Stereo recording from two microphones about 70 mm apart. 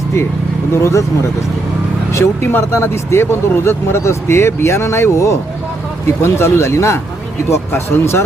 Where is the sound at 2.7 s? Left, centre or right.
Left.